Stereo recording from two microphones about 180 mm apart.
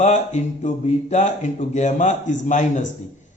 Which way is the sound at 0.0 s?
40° left (ahead or behind).